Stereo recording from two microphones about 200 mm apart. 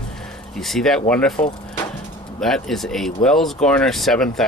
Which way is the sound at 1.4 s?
40° left (ahead or behind).